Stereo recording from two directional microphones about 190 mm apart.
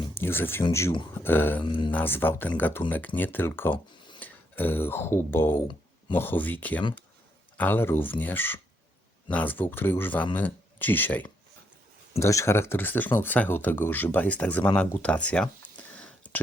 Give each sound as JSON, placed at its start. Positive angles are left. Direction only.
{"t": 0.1, "sound": "a sound", "side_deg": 10}
{"t": 0.6, "sound": "speech", "side_deg": 15}
{"t": 1.6, "sound": "speech", "side_deg": 25}
{"t": 1.9, "sound": "speech", "side_deg": 10}